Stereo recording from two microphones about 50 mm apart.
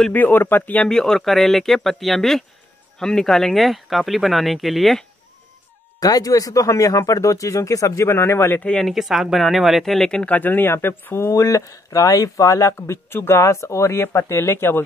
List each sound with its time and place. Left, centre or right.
0.1 s speech: left
0.8 s speech: centre
6.5 s speech: left
8.1 s speech: left
8.8 s speech: centre
9.9 s speech: centre
10.2 s speech: left
10.7 s speech: left
11.2 s speech: left
13.1 s speech: left